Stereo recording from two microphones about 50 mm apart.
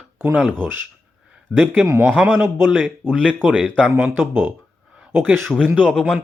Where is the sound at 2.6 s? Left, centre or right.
Right.